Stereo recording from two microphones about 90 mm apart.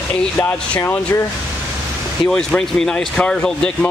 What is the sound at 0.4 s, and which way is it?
Speech, 25° left (ahead or behind).